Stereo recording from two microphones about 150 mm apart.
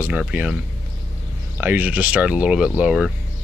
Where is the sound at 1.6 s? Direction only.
10° right (ahead or behind).